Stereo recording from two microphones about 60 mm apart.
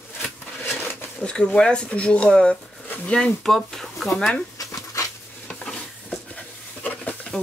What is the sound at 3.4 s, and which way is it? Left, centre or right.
Speech, centre.